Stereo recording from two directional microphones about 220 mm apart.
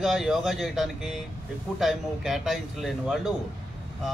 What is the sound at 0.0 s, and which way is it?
A man's voice, centre (ahead or behind).